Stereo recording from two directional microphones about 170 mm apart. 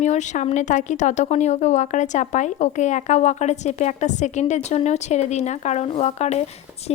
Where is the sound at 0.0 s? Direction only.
45° left (ahead or behind).